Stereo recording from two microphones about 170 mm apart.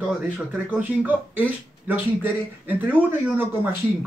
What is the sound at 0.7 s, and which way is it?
Speech, 10° right (ahead or behind).